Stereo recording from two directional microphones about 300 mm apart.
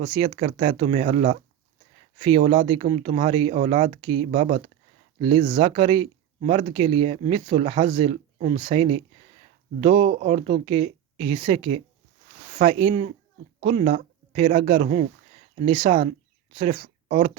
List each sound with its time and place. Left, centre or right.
0.1 s speech: centre